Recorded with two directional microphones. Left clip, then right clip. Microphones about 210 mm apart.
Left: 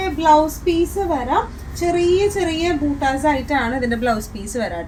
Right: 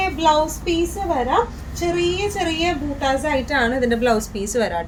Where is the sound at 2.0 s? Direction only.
30° right (ahead or behind).